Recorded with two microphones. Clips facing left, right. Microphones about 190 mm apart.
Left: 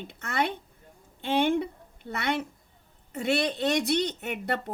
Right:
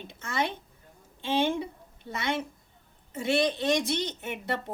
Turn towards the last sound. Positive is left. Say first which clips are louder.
# left 2 dB
turn(degrees=65)  # may be behind; listen again after turning